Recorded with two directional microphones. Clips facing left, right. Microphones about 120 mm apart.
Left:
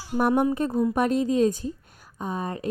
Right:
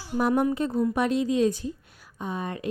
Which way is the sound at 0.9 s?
45° left (ahead or behind).